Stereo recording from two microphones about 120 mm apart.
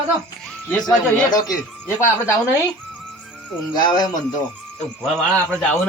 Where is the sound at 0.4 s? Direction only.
5° left (ahead or behind).